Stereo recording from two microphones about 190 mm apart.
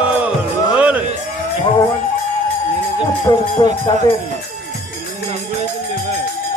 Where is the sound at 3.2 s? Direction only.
20° left (ahead or behind).